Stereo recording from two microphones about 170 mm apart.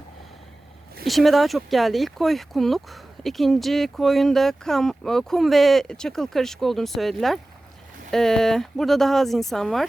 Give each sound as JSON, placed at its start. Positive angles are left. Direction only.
{"t": 1.0, "sound": "speech", "side_deg": 0}